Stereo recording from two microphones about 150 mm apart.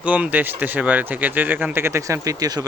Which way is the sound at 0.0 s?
10° right (ahead or behind).